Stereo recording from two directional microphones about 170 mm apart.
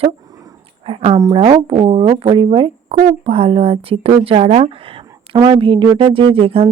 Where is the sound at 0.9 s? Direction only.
35° right (ahead or behind).